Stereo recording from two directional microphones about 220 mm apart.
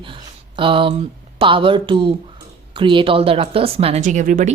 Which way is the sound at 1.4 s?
25° right (ahead or behind).